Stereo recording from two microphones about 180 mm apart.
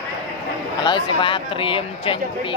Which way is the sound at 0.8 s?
25° left (ahead or behind).